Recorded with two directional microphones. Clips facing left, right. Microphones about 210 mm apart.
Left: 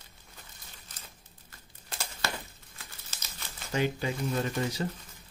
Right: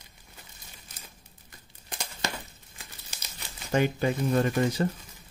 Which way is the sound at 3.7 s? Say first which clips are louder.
Right 5 dB; 50° right (ahead or behind).